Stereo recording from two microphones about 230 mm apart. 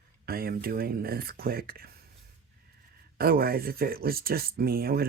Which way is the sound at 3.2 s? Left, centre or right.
Right.